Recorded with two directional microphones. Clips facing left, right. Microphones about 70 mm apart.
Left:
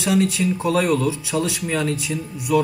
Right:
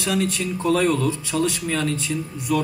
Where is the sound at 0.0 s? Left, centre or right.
Centre.